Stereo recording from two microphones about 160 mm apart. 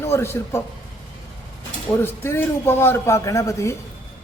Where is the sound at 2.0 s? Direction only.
15° left (ahead or behind).